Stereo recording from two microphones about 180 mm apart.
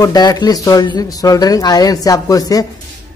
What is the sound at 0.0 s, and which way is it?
Speech, 20° left (ahead or behind).